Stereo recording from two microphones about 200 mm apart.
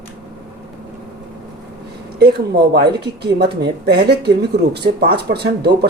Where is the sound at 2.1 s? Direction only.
55° right (ahead or behind).